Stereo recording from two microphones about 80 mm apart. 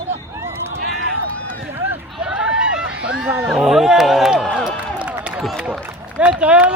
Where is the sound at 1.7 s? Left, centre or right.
Right.